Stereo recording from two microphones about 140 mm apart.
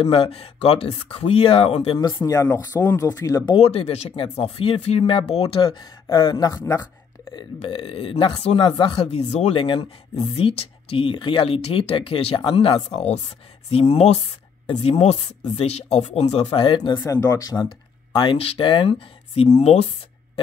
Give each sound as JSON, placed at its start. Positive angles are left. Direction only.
{"t": 0.0, "sound": "speech", "side_deg": 45}
{"t": 2.1, "sound": "speech", "side_deg": 20}
{"t": 3.5, "sound": "speech", "side_deg": 45}
{"t": 7.3, "sound": "speech", "side_deg": 40}